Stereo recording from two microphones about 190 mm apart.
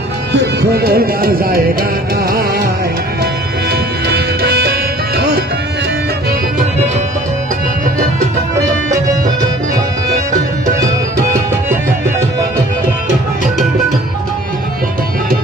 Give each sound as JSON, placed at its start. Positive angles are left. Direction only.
{"t": 0.7, "sound": "music", "side_deg": -55}
{"t": 3.7, "sound": "music", "side_deg": -60}